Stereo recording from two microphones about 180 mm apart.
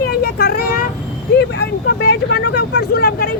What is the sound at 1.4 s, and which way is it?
Speech, 85° left.